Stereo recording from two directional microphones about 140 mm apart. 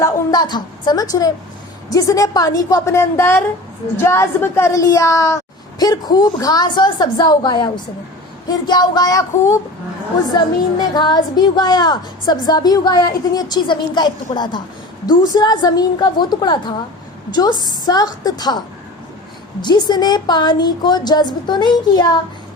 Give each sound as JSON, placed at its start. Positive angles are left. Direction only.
{"t": 0.0, "sound": "a woman's voice", "side_deg": 30}
{"t": 19.6, "sound": "a woman's voice", "side_deg": 30}